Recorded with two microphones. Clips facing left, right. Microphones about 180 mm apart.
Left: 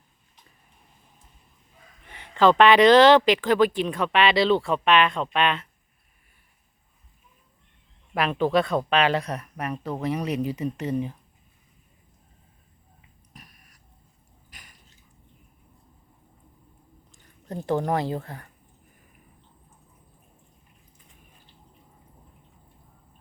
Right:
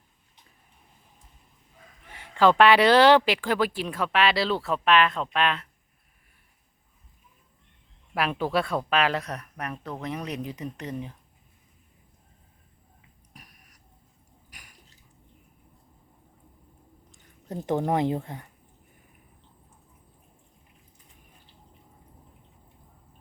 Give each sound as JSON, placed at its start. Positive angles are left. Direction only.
{"t": 2.0, "sound": "speech", "side_deg": -10}
{"t": 8.1, "sound": "speech", "side_deg": -5}
{"t": 13.3, "sound": "a sound", "side_deg": -10}
{"t": 17.1, "sound": "speech", "side_deg": -15}